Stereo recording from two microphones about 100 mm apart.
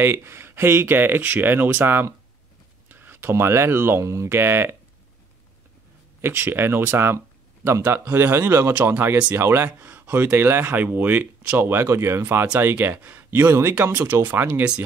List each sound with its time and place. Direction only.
0.0 s speech: 25° right (ahead or behind)
6.2 s speech: 20° right (ahead or behind)